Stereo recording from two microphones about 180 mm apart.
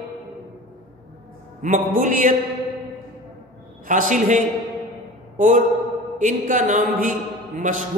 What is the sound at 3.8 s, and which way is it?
A man's voice, 45° right (ahead or behind).